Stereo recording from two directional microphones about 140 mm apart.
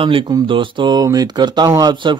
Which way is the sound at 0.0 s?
35° right (ahead or behind).